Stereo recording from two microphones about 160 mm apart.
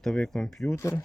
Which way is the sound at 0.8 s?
15° left (ahead or behind).